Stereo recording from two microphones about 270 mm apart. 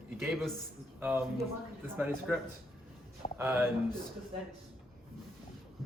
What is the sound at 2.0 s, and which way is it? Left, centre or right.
Speech, centre.